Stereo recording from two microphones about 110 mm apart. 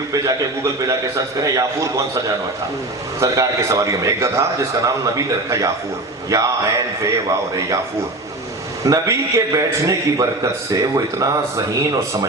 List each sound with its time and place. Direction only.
0.1 s a man's voice: 30° right (ahead or behind)
8.8 s a man's voice: 30° right (ahead or behind)